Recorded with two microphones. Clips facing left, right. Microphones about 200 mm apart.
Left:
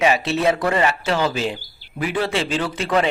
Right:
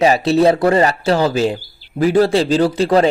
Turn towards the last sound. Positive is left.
turn(degrees=-35)  # may be behind; listen again after turning